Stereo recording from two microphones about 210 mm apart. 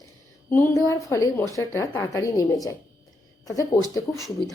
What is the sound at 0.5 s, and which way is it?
A woman's voice, 10° left (ahead or behind).